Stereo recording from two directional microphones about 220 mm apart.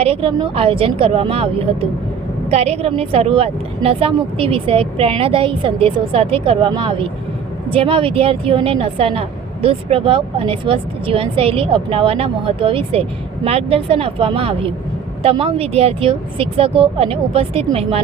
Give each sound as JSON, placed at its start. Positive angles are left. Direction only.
{"t": 0.0, "sound": "a woman's voice", "side_deg": -25}